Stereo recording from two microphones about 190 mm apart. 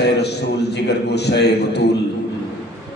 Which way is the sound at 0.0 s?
60° left (ahead or behind).